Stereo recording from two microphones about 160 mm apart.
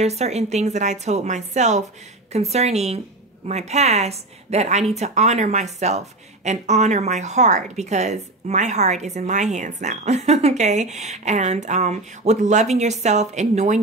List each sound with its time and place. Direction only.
0.0 s speech: 45° right (ahead or behind)